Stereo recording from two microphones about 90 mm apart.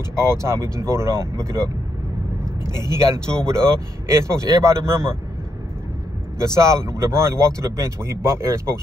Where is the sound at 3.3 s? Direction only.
35° right (ahead or behind).